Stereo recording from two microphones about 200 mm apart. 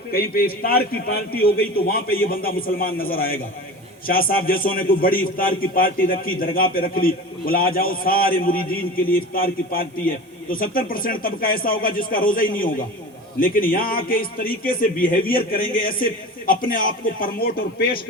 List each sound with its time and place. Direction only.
0.1 s a man's voice: 45° left (ahead or behind)